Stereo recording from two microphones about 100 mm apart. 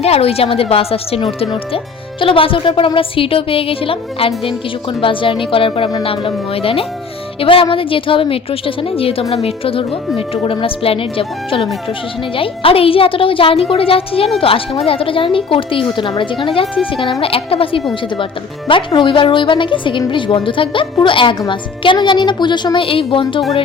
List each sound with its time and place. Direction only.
0.0 s a woman's voice: 90° left; by 1.5 s 75° left (ahead or behind)
2.2 s a woman's voice: 60° left (ahead or behind)
18.9 s a woman's voice: 55° left (ahead or behind)